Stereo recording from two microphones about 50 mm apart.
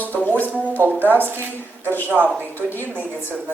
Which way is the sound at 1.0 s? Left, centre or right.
Right.